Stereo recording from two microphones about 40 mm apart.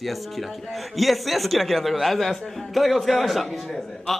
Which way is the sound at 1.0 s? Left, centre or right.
Centre.